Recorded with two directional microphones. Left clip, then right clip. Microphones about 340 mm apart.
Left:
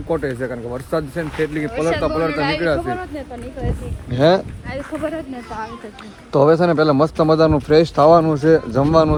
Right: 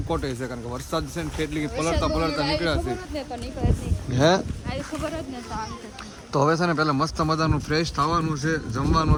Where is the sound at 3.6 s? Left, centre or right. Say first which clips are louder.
Left 2 dB; centre.